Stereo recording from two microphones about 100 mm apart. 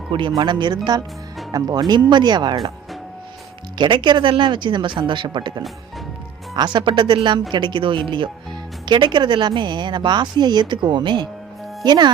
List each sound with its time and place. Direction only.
0.1 s a woman's voice: 55° right (ahead or behind)
3.8 s a woman's voice: 50° right (ahead or behind)
6.7 s a woman's voice: 50° right (ahead or behind)